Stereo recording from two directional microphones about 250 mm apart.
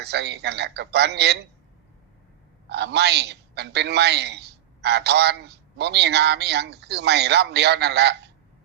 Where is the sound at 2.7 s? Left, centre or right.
Right.